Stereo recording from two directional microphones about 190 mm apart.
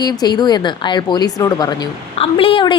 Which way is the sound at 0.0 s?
20° left (ahead or behind).